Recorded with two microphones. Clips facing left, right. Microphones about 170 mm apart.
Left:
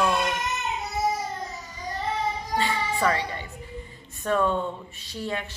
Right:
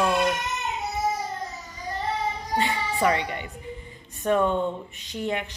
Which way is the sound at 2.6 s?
20° right (ahead or behind).